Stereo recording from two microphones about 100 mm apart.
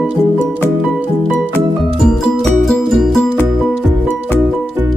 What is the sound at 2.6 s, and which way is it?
Music, 5° left (ahead or behind).